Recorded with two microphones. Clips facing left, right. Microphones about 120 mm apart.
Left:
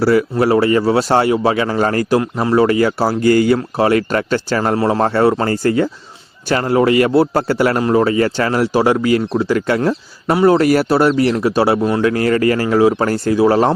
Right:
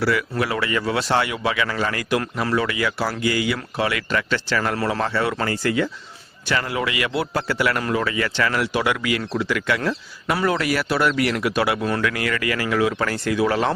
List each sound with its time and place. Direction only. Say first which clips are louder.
0.0 s speech: left 9 dB; 35° left (ahead or behind)
2.6 s speech: left 9 dB; 40° left (ahead or behind); by 12.1 s 25° left (ahead or behind)
12.1 s speech: left 10 dB; 35° left (ahead or behind)